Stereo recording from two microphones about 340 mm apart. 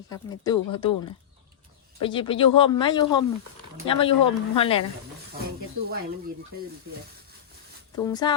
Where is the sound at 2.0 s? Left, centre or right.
Centre.